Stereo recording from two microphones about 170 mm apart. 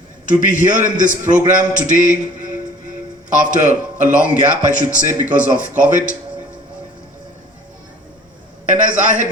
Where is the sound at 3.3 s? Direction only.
50° right (ahead or behind).